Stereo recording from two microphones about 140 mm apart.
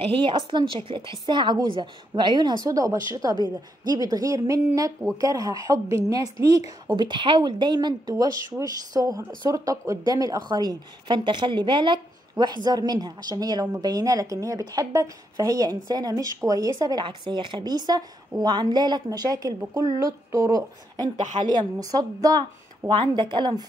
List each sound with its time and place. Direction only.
0.0 s a woman's voice: 35° right (ahead or behind)